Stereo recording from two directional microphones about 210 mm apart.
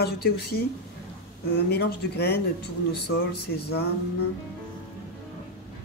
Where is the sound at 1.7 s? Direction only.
50° left (ahead or behind).